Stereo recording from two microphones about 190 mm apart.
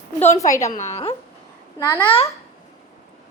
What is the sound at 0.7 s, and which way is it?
A woman's voice, 35° left (ahead or behind).